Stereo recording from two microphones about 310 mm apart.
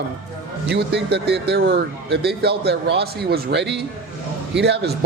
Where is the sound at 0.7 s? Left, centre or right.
Right.